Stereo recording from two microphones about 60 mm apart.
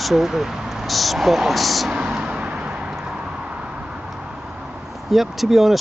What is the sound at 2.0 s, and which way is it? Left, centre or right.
Vehicle, right.